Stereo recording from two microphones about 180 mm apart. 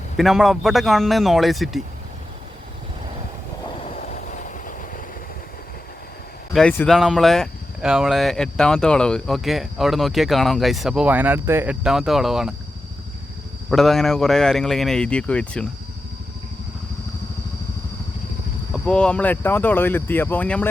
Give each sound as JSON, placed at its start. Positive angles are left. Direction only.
{"t": 0.2, "sound": "speech", "side_deg": 0}
{"t": 3.9, "sound": "train", "side_deg": 45}
{"t": 6.5, "sound": "speech", "side_deg": 5}
{"t": 13.7, "sound": "speech", "side_deg": 0}
{"t": 18.7, "sound": "speech", "side_deg": 5}